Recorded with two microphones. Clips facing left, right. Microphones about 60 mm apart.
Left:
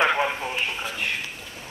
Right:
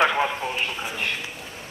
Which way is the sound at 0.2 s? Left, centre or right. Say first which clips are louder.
Right 1 dB; centre.